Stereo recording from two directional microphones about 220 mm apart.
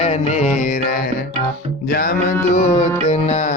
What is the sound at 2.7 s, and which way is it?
Music, 30° left (ahead or behind).